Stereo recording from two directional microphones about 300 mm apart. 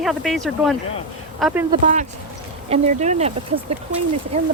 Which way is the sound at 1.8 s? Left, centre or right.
Right.